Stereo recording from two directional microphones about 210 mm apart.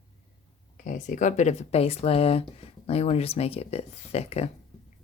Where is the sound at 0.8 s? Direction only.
35° left (ahead or behind).